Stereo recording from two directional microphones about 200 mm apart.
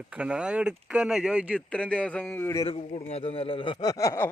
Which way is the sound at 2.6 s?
30° left (ahead or behind).